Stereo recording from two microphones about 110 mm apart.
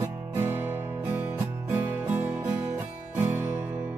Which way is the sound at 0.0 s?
25° right (ahead or behind).